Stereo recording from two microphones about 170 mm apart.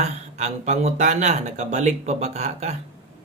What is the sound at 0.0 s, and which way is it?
Speech, 40° right (ahead or behind).